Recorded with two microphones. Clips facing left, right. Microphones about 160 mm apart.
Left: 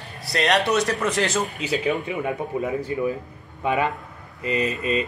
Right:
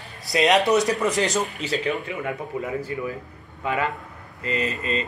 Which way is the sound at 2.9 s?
25° left (ahead or behind).